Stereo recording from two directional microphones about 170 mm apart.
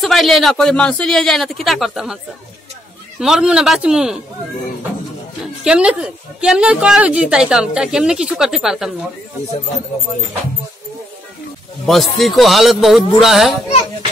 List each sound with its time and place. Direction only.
0.0 s a woman's voice: centre (ahead or behind)
3.2 s a woman's voice: 5° right (ahead or behind)
5.6 s a woman's voice: 5° right (ahead or behind)
11.8 s a woman's voice: centre (ahead or behind)